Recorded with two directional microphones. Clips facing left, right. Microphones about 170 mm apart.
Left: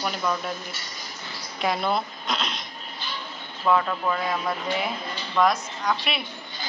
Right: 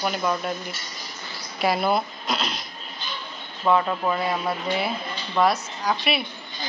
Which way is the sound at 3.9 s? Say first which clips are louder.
Right 2 dB; 20° right (ahead or behind).